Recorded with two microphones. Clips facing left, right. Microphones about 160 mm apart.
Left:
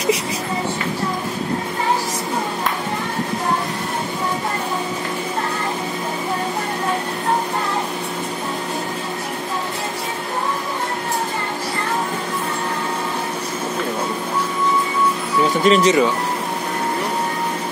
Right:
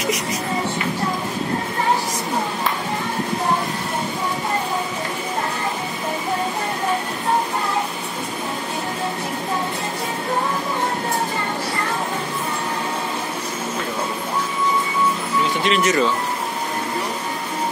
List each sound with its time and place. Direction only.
15.6 s speech: 35° left (ahead or behind)